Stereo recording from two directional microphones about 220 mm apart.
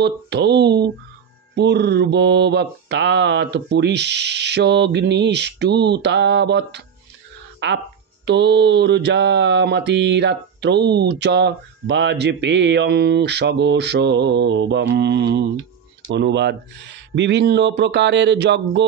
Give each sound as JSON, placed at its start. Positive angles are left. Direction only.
{"t": 0.0, "sound": "mantra", "side_deg": -50}
{"t": 7.6, "sound": "speech", "side_deg": -55}
{"t": 8.3, "sound": "mantra", "side_deg": -50}